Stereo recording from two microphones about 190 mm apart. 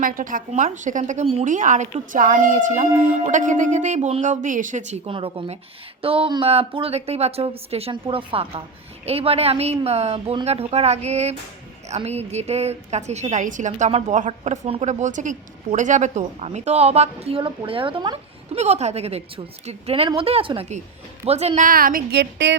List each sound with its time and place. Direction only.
0.0 s a woman's voice: 45° right (ahead or behind); by 18.2 s 25° right (ahead or behind)
18.5 s a woman's voice: 35° right (ahead or behind); by 22.5 s 65° right (ahead or behind)